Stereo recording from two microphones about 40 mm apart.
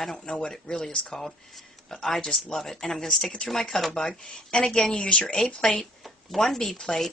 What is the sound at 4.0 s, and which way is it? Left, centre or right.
A woman's voice, centre.